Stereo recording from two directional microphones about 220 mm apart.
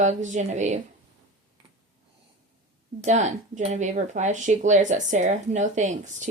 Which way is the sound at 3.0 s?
35° right (ahead or behind).